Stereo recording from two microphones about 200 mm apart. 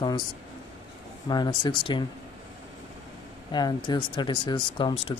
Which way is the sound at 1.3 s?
20° left (ahead or behind).